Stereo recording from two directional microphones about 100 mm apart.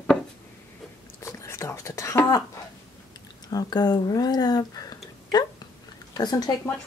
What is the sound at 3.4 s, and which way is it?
A woman's voice, 45° left (ahead or behind).